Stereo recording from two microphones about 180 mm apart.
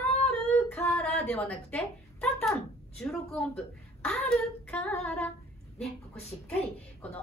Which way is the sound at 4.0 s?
5° left (ahead or behind).